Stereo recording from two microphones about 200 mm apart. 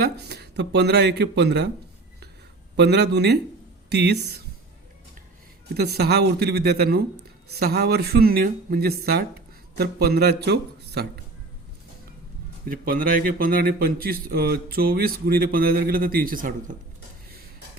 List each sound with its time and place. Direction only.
0.0 s speech: 55° right (ahead or behind)
2.7 s speech: 55° right (ahead or behind)
5.7 s speech: 55° right (ahead or behind)
12.6 s speech: 45° right (ahead or behind)